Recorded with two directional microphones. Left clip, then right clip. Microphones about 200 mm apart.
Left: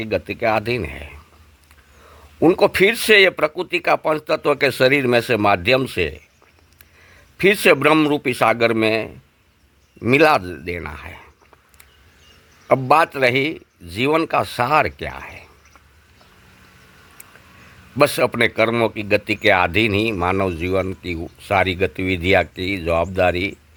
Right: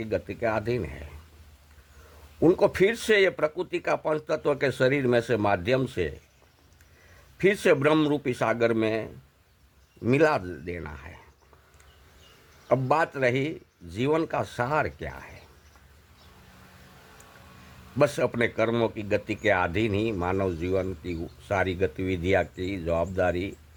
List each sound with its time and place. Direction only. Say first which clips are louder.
0.0 s a man's voice: left 8 dB; 25° left (ahead or behind)
2.4 s a man's voice: left 7 dB; 25° left (ahead or behind)
7.3 s a man's voice: left 8 dB; 25° left (ahead or behind)
12.6 s a man's voice: left 9 dB; 25° left (ahead or behind)
17.9 s a man's voice: left 8 dB; 25° left (ahead or behind)